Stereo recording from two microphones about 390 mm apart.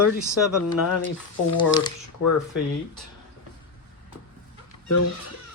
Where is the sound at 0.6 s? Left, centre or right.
Left.